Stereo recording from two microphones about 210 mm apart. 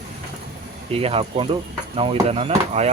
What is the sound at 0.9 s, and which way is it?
Speech, 25° right (ahead or behind).